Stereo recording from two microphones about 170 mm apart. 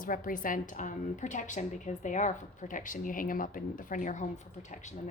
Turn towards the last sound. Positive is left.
turn(degrees=45)  # may be behind; listen again after turning